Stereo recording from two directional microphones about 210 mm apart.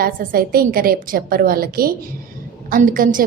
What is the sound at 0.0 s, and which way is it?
A woman's voice, 45° right (ahead or behind).